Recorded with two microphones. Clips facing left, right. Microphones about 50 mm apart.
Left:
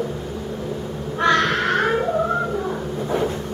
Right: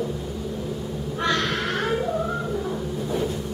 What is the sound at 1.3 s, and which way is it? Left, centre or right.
Crow, left.